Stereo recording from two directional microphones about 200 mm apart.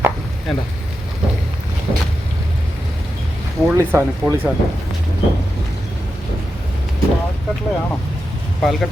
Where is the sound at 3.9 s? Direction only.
10° right (ahead or behind).